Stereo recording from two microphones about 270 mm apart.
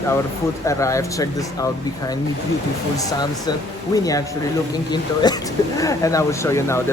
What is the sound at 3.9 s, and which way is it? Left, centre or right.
Speech, centre.